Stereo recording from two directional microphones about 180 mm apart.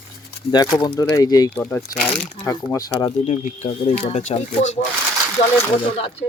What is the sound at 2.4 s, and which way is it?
Speech, 20° left (ahead or behind).